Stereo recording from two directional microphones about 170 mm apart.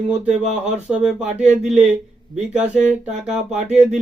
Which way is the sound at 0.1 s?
45° right (ahead or behind).